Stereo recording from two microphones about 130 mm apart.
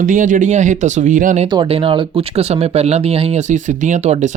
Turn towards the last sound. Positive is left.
turn(degrees=-60)  # may be behind; listen again after turning